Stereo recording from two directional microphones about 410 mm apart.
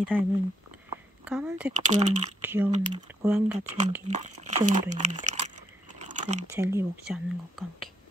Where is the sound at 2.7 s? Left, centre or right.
Centre.